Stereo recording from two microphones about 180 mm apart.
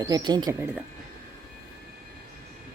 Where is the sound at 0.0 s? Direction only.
20° right (ahead or behind).